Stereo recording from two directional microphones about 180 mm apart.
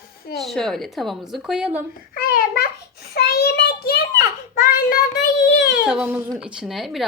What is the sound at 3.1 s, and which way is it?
Child singing, 60° left (ahead or behind).